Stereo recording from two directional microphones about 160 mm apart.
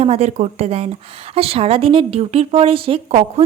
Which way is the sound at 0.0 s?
40° right (ahead or behind).